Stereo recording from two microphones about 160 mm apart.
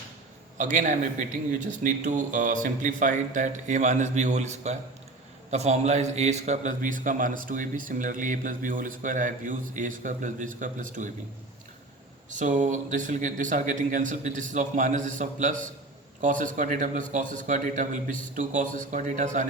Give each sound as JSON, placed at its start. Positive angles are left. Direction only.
{"t": 0.6, "sound": "a man's voice", "side_deg": -50}
{"t": 12.3, "sound": "a man's voice", "side_deg": -50}